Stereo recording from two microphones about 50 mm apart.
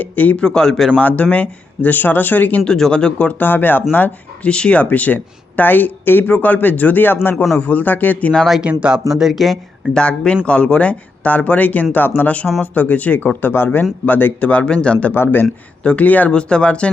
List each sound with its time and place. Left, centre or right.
0.0 s speech: left
0.4 s speech: centre
0.9 s speech: left
2.6 s speech: centre
3.3 s speech: left
4.4 s speech: left
8.6 s speech: right
9.1 s speech: centre
9.9 s speech: centre; by 14.5 s left
14.6 s speech: centre
15.1 s a man's voice: left
15.8 s speech: left
16.0 s speech: left
16.3 s speech: centre